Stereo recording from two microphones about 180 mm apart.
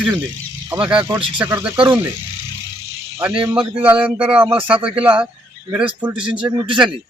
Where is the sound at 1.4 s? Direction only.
10° right (ahead or behind).